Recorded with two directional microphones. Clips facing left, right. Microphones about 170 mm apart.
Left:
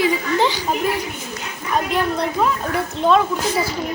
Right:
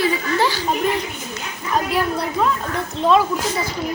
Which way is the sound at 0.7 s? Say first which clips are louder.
Right 1 dB; 5° left (ahead or behind).